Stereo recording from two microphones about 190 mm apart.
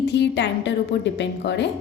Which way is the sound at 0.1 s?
65° left (ahead or behind).